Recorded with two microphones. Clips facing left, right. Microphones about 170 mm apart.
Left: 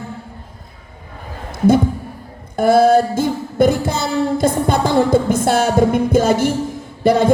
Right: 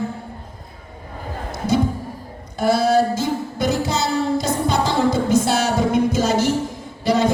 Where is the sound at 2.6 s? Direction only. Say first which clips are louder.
Left 5 dB; 55° left (ahead or behind).